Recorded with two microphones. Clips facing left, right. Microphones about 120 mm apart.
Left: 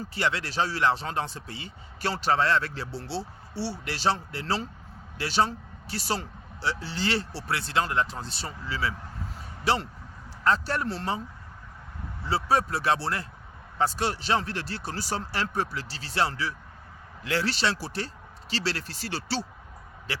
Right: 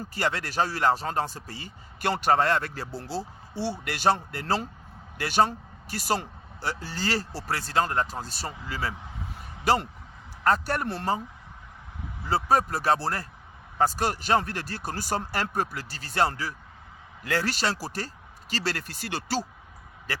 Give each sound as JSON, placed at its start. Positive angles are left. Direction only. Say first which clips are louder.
{"t": 0.1, "sound": "speech", "louder": "even", "side_deg": -45}
{"t": 10.4, "sound": "speech", "louder": "right 1 dB", "side_deg": -50}
{"t": 12.3, "sound": "speech", "louder": "right 1 dB", "side_deg": -45}